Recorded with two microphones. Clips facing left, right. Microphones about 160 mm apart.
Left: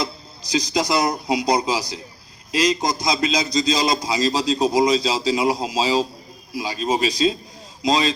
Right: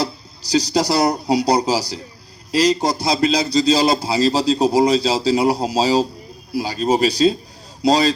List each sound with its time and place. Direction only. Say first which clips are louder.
0.0 s a man's voice: right 4 dB; 35° right (ahead or behind)